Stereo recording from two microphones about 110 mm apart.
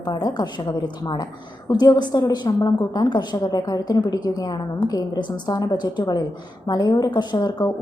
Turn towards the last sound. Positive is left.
turn(degrees=40)  # may be behind; listen again after turning